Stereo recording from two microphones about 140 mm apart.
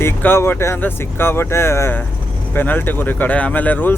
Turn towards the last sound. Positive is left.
turn(degrees=15)  # may be behind; listen again after turning